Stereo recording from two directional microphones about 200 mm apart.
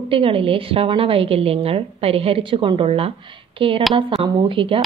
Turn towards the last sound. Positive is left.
turn(degrees=-25)  # may be behind; listen again after turning